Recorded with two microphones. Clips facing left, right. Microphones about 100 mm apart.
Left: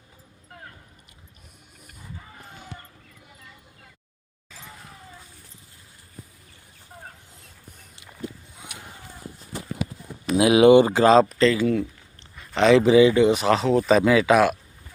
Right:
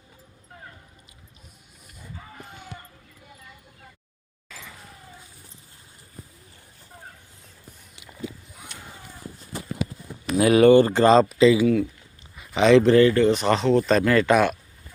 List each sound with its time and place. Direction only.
10.3 s speech: 10° left (ahead or behind)
10.9 s speech: centre (ahead or behind)
13.4 s speech: centre (ahead or behind)